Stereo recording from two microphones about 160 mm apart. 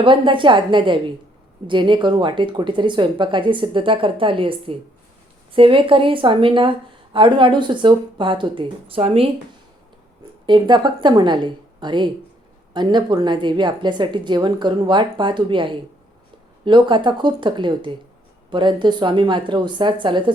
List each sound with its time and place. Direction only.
0.0 s a woman's voice: 30° right (ahead or behind)
10.4 s a woman's voice: 30° right (ahead or behind)